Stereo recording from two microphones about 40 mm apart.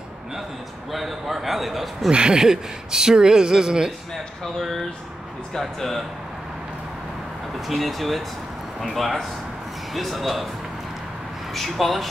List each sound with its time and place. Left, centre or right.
0.9 s a man's voice: centre
2.0 s speech: right
4.6 s a man's voice: centre
7.6 s a man's voice: centre
11.5 s a man's voice: centre